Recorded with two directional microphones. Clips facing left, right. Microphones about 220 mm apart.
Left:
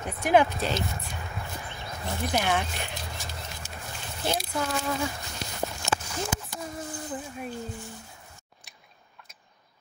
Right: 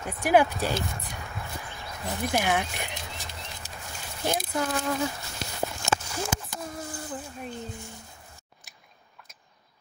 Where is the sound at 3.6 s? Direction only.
35° right (ahead or behind).